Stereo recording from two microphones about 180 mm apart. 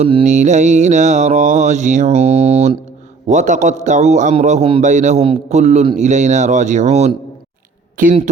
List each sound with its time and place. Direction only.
0.0 s mantra: 35° right (ahead or behind)
8.0 s speech: 50° right (ahead or behind)